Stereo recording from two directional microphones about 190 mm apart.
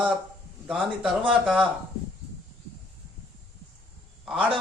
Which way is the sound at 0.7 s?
Centre (ahead or behind).